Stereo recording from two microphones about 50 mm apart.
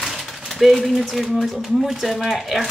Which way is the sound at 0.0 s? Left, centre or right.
Centre.